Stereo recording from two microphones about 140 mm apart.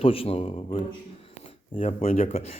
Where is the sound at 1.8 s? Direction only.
55° left (ahead or behind).